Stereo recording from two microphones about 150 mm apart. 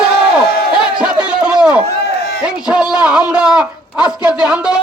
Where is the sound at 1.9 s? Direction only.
90° left.